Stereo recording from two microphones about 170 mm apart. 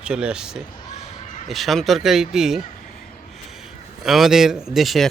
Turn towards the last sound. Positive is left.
turn(degrees=0)  # may be behind; listen again after turning